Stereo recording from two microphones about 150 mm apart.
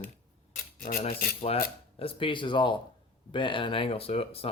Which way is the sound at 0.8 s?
75° left (ahead or behind).